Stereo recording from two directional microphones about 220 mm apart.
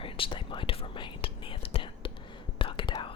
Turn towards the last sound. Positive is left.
turn(degrees=20)  # may be behind; listen again after turning